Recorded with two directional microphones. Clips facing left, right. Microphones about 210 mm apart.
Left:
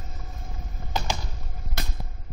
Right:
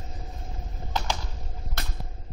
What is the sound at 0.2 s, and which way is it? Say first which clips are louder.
Vehicle: right 1 dB; 25° right (ahead or behind).